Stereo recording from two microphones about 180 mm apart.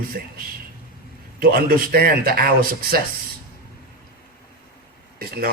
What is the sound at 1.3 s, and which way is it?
Speech, 55° right (ahead or behind).